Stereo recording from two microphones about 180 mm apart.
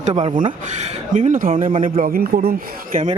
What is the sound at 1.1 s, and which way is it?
Speech, 45° right (ahead or behind).